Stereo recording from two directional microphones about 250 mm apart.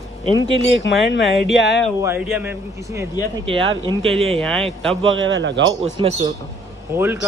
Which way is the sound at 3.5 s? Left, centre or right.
Right.